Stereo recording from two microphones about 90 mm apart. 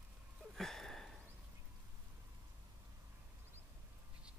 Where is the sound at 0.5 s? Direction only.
5° left (ahead or behind).